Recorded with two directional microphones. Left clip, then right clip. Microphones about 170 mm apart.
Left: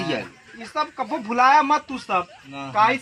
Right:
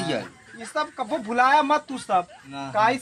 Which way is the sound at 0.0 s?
Centre (ahead or behind).